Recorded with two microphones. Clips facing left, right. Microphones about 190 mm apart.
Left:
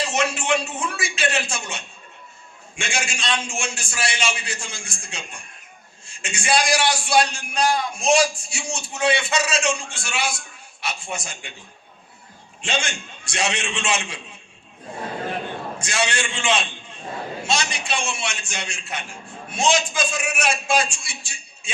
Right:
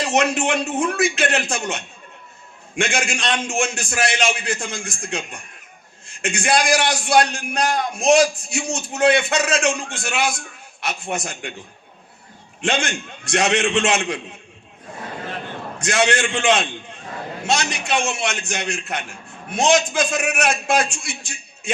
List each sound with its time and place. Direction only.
0.0 s a man's voice: 60° right (ahead or behind)
12.6 s a man's voice: 60° right (ahead or behind)
15.8 s a man's voice: 60° right (ahead or behind)